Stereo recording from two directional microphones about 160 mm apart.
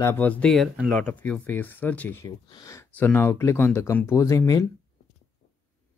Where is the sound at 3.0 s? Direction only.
10° left (ahead or behind).